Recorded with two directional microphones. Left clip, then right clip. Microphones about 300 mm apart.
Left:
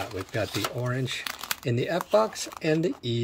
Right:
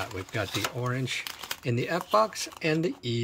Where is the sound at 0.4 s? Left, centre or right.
Centre.